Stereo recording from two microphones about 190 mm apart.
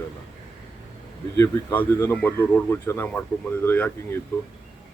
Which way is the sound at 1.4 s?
10° left (ahead or behind).